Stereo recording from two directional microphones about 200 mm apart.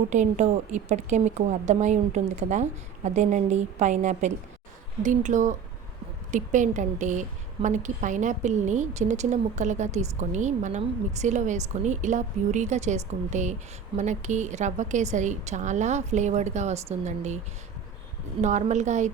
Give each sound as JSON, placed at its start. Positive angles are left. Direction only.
{"t": 0.1, "sound": "a woman's voice", "side_deg": -35}
{"t": 18.4, "sound": "a woman's voice", "side_deg": -35}